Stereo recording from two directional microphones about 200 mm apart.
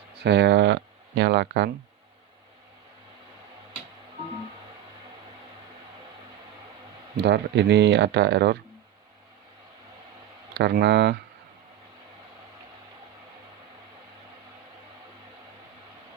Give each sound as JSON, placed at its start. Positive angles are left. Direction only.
{"t": 0.1, "sound": "speech", "side_deg": -60}
{"t": 7.2, "sound": "speech", "side_deg": -60}
{"t": 10.5, "sound": "speech", "side_deg": -60}